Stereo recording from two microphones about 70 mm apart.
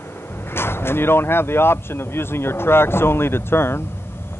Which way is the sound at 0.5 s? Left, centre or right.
Left.